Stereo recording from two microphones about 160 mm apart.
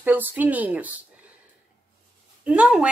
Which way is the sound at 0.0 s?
10° right (ahead or behind).